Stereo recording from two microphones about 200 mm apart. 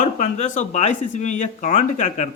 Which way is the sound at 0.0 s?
40° left (ahead or behind).